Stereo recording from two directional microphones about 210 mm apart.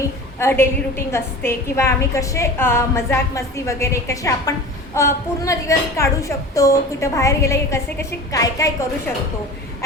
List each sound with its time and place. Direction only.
0.3 s a woman's voice: 10° left (ahead or behind)